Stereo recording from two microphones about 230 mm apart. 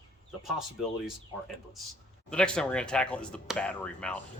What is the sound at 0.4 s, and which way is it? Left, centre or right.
Speech, centre.